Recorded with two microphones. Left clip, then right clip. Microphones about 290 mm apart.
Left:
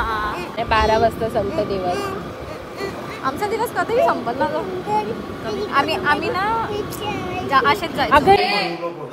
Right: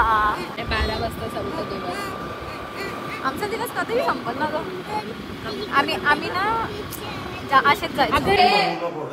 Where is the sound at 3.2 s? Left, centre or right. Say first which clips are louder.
Left 5 dB; centre.